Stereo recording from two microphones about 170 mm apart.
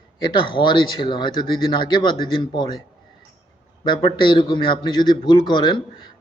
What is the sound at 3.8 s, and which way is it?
A man's voice, 30° left (ahead or behind).